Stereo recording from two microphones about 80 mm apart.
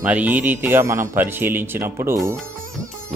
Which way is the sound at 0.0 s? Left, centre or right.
Centre.